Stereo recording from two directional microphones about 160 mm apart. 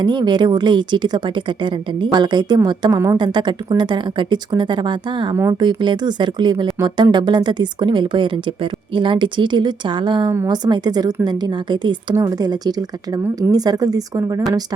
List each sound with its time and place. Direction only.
0.0 s a woman's voice: 25° right (ahead or behind)